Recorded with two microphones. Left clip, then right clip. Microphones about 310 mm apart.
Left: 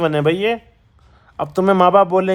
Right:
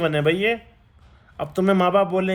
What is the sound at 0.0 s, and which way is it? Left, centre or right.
Speech, centre.